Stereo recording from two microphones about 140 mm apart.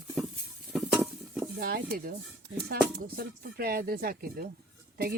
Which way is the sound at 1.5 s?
90° right.